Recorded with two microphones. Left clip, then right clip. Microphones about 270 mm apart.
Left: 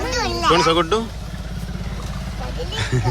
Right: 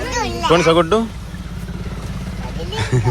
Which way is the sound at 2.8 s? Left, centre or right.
Centre.